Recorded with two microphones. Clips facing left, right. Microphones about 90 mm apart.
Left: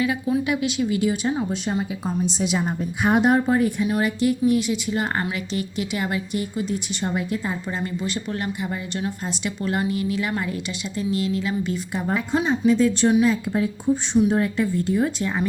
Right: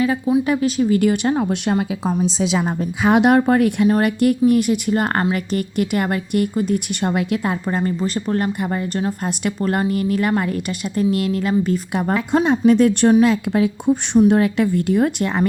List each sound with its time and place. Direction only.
0.4 s speech: 40° right (ahead or behind)
1.0 s speech: 65° right (ahead or behind); by 2.6 s 90° right
3.1 s speech: 75° right (ahead or behind)
3.8 s speech: 50° right (ahead or behind); by 7.5 s 75° right (ahead or behind)
7.7 s speech: 45° right (ahead or behind)
11.9 s speech: 65° right (ahead or behind)
13.2 s speech: 75° right (ahead or behind); by 15.4 s 60° right (ahead or behind)